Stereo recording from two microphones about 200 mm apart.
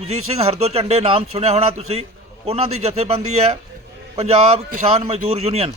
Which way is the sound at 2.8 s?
30° right (ahead or behind).